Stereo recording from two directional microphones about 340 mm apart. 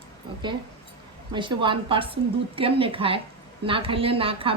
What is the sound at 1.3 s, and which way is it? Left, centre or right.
A woman's voice, centre.